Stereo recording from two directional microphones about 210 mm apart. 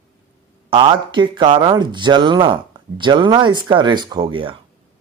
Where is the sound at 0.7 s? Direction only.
25° right (ahead or behind).